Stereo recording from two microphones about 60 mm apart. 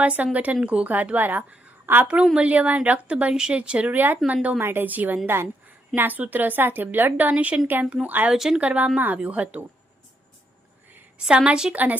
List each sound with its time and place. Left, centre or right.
0.0 s a woman's voice: right
3.9 s a woman's voice: right
5.6 s a woman's voice: right
8.3 s a woman's voice: centre
8.6 s a woman's voice: right
11.2 s a woman's voice: centre
11.7 s a woman's voice: right